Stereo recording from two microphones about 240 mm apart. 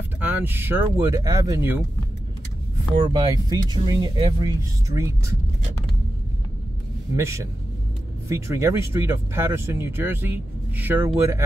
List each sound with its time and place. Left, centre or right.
0.2 s speech: centre
3.0 s speech: centre
7.2 s speech: centre